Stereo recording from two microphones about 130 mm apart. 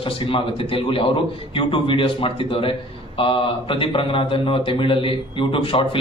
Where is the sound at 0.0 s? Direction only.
40° left (ahead or behind).